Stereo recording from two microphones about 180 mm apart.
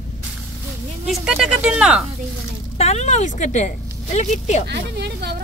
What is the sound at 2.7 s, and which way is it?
Speech, 35° left (ahead or behind).